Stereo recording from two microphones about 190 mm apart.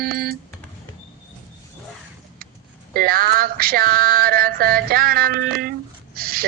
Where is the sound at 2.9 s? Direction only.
50° right (ahead or behind).